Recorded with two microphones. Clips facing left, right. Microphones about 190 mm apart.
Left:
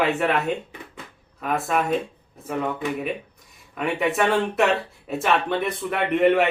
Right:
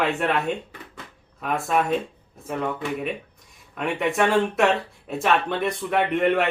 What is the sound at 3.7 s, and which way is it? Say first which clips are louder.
Speech: even; centre (ahead or behind).